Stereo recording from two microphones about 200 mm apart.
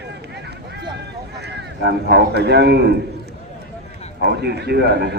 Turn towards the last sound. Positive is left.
turn(degrees=-55)  # may be behind; listen again after turning